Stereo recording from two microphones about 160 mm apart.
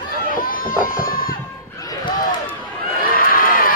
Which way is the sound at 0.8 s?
65° left (ahead or behind).